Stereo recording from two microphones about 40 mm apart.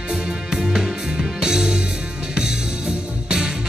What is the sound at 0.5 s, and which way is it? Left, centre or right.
Music, centre.